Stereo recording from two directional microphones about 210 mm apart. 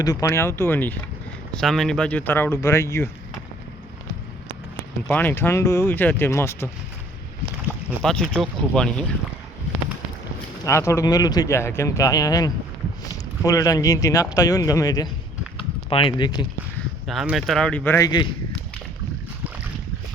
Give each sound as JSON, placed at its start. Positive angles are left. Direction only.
{"t": 0.0, "sound": "speech", "side_deg": 15}
{"t": 5.0, "sound": "speech", "side_deg": 10}
{"t": 7.9, "sound": "speech", "side_deg": 5}
{"t": 10.6, "sound": "speech", "side_deg": 15}
{"t": 17.1, "sound": "speech", "side_deg": 0}